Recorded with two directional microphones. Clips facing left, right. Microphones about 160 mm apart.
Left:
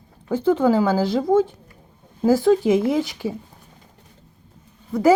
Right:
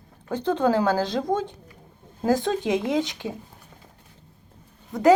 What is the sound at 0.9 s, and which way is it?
Speech, 10° left (ahead or behind).